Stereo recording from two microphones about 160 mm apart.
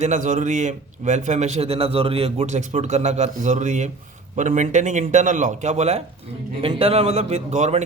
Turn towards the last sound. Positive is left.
turn(degrees=-45)  # may be behind; listen again after turning